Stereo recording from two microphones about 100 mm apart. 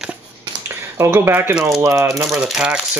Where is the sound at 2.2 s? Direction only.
5° right (ahead or behind).